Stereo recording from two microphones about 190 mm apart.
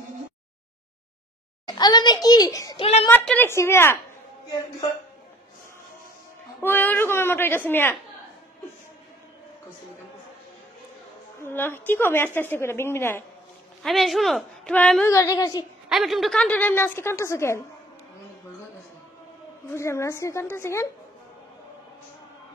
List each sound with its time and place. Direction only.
1.7 s a sound: 20° left (ahead or behind)
2.8 s a woman's voice: 30° left (ahead or behind)
3.1 s a woman's voice: 10° left (ahead or behind)
6.6 s a woman's voice: 10° left (ahead or behind)
11.4 s a woman's voice: 10° left (ahead or behind)
13.8 s a woman's voice: centre (ahead or behind)
15.0 s a woman's voice: 15° left (ahead or behind)
15.9 s a woman's voice: centre (ahead or behind)
19.7 s a woman's voice: 15° left (ahead or behind)